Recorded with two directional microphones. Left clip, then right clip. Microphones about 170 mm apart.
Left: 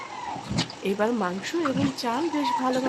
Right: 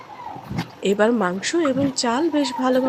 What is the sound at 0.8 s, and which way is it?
Speech, 30° right (ahead or behind).